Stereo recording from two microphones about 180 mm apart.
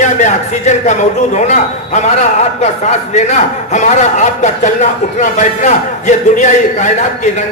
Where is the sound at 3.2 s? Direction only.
40° left (ahead or behind).